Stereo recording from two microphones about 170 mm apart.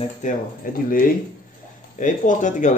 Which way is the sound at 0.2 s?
45° left (ahead or behind).